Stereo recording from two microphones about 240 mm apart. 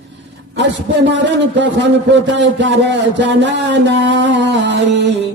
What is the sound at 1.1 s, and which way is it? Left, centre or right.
A man's voice, right.